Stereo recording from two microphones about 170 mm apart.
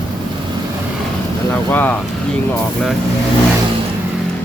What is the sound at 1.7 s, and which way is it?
Speech, 10° left (ahead or behind).